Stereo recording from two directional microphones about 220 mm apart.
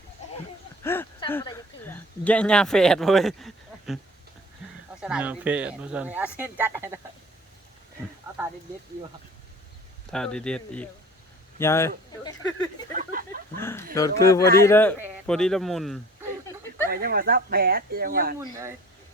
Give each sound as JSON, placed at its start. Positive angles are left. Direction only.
{"t": 0.8, "sound": "a sound", "side_deg": 10}
{"t": 1.3, "sound": "speech", "side_deg": 10}
{"t": 10.1, "sound": "speech", "side_deg": 5}
{"t": 12.9, "sound": "a sound", "side_deg": -40}
{"t": 13.6, "sound": "speech", "side_deg": 10}
{"t": 16.9, "sound": "speech", "side_deg": -40}